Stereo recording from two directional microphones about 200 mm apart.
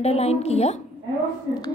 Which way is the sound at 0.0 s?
30° left (ahead or behind).